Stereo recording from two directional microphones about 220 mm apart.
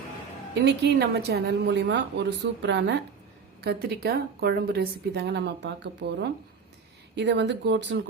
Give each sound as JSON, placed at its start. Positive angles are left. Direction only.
{"t": 0.6, "sound": "a woman's voice", "side_deg": -50}